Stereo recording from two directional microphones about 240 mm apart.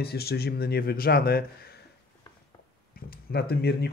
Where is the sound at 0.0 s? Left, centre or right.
Left.